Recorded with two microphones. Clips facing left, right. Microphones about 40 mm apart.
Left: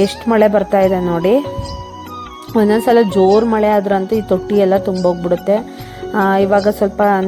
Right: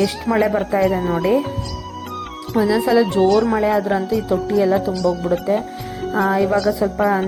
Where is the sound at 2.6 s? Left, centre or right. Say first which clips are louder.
Left 5 dB; left.